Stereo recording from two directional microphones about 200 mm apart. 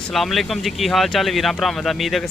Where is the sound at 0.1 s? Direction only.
Centre (ahead or behind).